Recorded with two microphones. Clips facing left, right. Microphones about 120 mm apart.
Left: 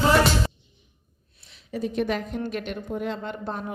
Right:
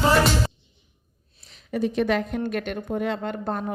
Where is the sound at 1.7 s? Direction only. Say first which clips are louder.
Right 3 dB; 85° right.